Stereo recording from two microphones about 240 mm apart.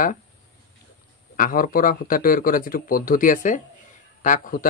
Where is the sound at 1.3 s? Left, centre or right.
Left.